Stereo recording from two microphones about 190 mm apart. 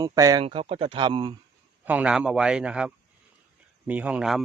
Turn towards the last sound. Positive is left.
turn(degrees=-5)  # may be behind; listen again after turning